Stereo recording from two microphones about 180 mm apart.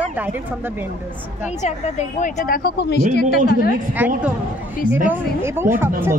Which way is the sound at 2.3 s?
55° left (ahead or behind).